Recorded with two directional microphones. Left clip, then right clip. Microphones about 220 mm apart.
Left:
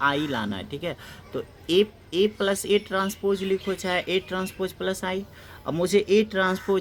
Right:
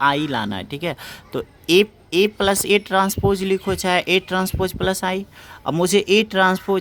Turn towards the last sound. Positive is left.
turn(degrees=-30)  # may be behind; listen again after turning